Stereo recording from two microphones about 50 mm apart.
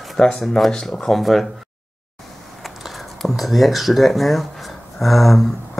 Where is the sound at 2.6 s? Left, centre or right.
Centre.